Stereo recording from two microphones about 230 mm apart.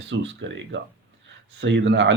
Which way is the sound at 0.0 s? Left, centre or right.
Right.